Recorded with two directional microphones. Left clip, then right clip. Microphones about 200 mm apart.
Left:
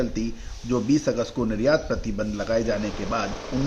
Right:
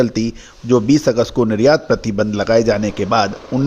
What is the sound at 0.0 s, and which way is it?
Speech, 45° right (ahead or behind).